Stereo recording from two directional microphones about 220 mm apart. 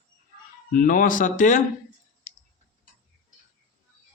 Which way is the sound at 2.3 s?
35° left (ahead or behind).